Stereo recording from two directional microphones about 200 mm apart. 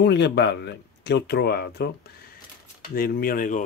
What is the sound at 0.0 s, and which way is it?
Speech, 60° left (ahead or behind).